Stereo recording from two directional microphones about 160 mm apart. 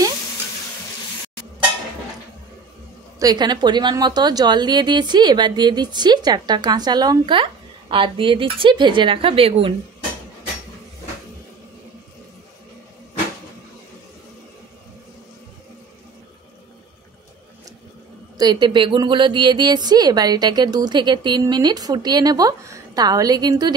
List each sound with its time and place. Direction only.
3.2 s a woman's voice: 25° right (ahead or behind)
18.4 s a woman's voice: 25° right (ahead or behind)